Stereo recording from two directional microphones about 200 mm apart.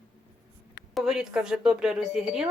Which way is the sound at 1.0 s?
Centre (ahead or behind).